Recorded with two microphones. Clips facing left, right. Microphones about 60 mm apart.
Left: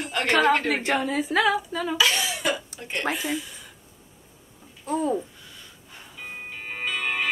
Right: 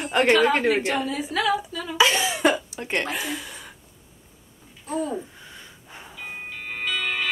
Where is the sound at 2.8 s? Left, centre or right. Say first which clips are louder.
Right 1 dB; right.